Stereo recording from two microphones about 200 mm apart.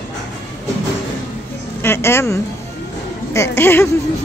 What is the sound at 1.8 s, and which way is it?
Speech, 10° left (ahead or behind).